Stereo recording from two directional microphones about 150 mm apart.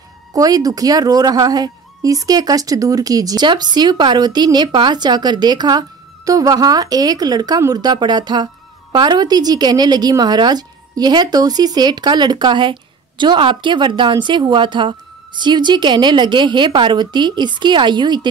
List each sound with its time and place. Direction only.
0.3 s a woman's voice: 25° right (ahead or behind)